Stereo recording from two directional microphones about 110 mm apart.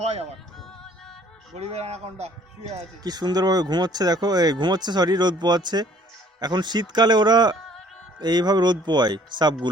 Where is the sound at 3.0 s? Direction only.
40° right (ahead or behind).